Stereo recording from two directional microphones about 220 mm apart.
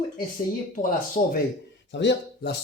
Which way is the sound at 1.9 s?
55° left (ahead or behind).